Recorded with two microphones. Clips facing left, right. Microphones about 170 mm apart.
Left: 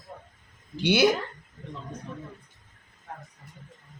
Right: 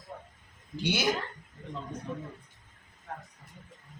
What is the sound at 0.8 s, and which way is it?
Speech, 65° left (ahead or behind).